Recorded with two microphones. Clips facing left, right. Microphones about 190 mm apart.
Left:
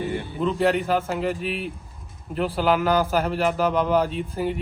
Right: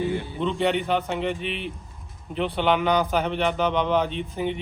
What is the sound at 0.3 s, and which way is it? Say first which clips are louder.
A man's voice: left 2 dB; centre (ahead or behind).